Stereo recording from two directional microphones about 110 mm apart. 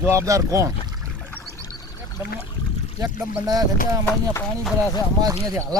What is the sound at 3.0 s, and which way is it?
Speech, 35° right (ahead or behind).